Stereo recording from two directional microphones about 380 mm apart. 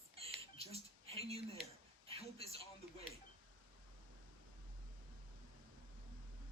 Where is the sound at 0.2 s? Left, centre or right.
Centre.